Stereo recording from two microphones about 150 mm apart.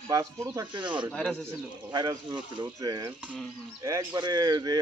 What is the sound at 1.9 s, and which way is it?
Speech, 30° right (ahead or behind).